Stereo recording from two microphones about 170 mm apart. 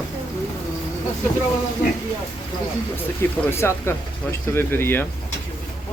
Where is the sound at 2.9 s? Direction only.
15° left (ahead or behind).